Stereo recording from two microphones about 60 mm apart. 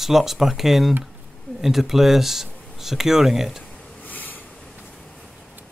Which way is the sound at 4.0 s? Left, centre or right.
Left.